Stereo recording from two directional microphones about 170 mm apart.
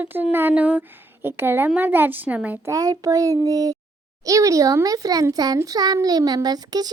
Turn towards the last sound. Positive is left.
turn(degrees=-25)  # may be behind; listen again after turning